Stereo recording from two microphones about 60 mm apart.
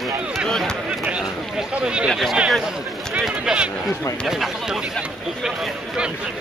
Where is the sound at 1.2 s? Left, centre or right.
Centre.